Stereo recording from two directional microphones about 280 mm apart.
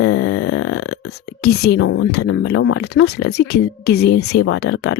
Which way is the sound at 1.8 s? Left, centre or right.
Left.